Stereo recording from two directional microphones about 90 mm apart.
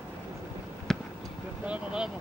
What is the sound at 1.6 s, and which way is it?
Speech, 10° right (ahead or behind).